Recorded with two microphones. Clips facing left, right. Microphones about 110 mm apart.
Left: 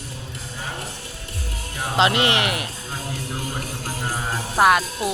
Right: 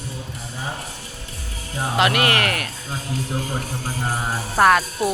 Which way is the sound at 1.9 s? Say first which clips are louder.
Even; 25° left (ahead or behind).